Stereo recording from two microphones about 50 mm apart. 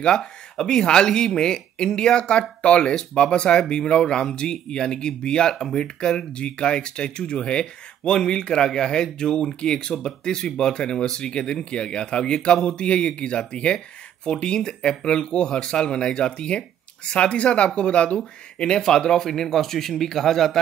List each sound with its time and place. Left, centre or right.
0.0 s speech: centre
18.8 s speech: centre